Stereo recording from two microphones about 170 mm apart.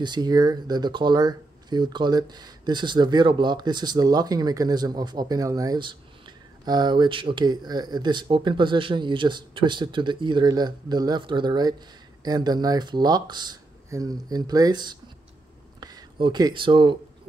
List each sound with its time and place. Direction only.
0.0 s speech: 25° right (ahead or behind)